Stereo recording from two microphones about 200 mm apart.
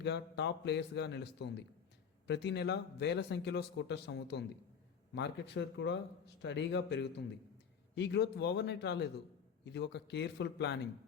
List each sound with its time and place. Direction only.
0.0 s speech: 60° left (ahead or behind)